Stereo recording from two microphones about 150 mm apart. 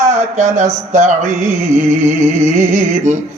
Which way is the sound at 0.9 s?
50° right (ahead or behind).